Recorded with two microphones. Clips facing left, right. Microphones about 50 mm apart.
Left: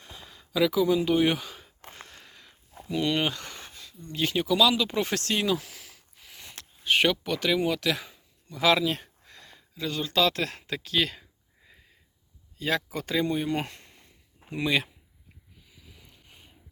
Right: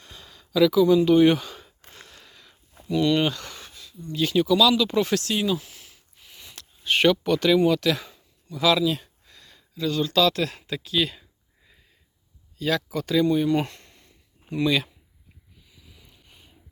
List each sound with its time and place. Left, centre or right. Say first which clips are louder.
0.0 s gasp: even; centre
1.8 s a sound: left 1 dB; left
2.9 s speech: right 5 dB; left
3.8 s speech: right 4 dB; left
5.2 s speech: right 2 dB; left
5.5 s a sound: right 1 dB; left
6.4 s a sound: even; left
6.8 s speech: right 4 dB; centre
8.6 s a sound: right 2 dB; left
9.6 s speech: right 6 dB; left
12.5 s speech: right 3 dB; left
14.5 s speech: right 3 dB; left